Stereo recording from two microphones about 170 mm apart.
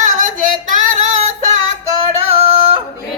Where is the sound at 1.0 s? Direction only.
40° right (ahead or behind).